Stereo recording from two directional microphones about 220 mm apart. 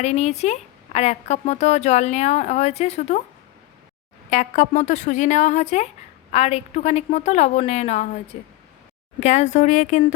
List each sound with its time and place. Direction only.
0.0 s speech: 30° left (ahead or behind)
4.3 s a woman's voice: 35° left (ahead or behind)